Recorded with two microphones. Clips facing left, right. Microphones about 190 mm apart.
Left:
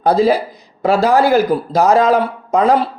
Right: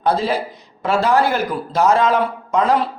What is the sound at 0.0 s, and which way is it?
Speech, 40° left (ahead or behind).